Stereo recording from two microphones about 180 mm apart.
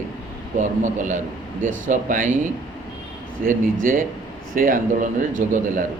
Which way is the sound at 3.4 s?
45° right (ahead or behind).